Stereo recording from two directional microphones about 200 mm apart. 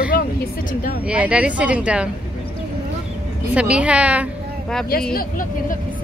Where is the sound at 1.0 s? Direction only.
5° right (ahead or behind).